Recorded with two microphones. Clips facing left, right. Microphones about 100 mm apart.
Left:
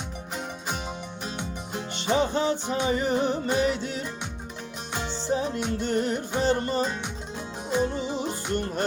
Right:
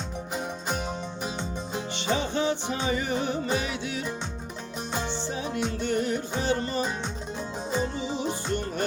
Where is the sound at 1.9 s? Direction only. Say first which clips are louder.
Left 4 dB; 45° left (ahead or behind).